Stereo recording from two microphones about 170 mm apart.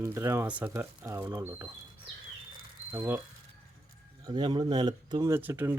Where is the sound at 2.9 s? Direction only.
15° right (ahead or behind).